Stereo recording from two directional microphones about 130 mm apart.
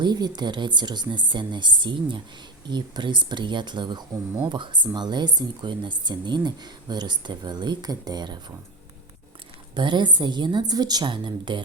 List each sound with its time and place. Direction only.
0.0 s speech: 35° right (ahead or behind)
9.7 s speech: 35° right (ahead or behind)